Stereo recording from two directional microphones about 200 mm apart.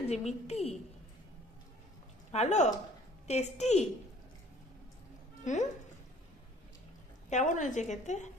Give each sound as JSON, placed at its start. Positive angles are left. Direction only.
{"t": 0.1, "sound": "a woman's voice", "side_deg": 35}
{"t": 2.3, "sound": "a woman's voice", "side_deg": 35}
{"t": 5.4, "sound": "speech", "side_deg": 35}
{"t": 7.2, "sound": "a woman's voice", "side_deg": 40}